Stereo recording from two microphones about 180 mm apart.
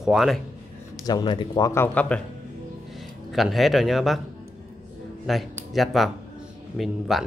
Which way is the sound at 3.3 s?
Centre (ahead or behind).